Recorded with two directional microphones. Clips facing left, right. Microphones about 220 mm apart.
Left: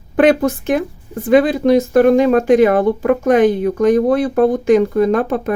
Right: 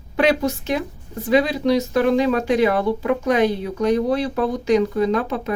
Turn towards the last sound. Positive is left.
turn(degrees=50)  # may be behind; listen again after turning